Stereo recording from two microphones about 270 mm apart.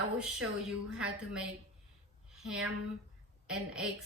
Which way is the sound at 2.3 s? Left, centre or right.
Centre.